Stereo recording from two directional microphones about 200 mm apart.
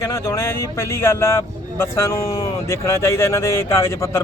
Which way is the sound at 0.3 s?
10° left (ahead or behind).